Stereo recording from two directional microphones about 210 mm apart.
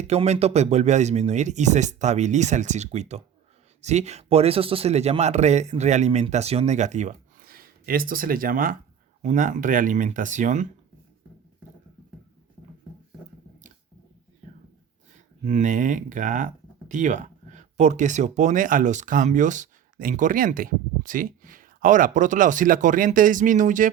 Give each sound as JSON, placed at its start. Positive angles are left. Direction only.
{"t": 0.0, "sound": "speech", "side_deg": -30}
{"t": 15.4, "sound": "speech", "side_deg": -35}